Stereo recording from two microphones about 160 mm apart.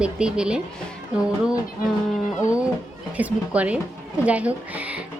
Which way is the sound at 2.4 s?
20° left (ahead or behind).